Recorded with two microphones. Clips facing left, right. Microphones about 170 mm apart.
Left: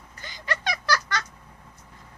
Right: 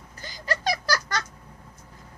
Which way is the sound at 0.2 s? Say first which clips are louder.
Right 2 dB; 40° right (ahead or behind).